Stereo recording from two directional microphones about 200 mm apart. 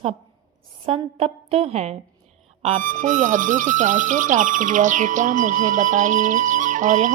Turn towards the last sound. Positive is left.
turn(degrees=-40)  # may be behind; listen again after turning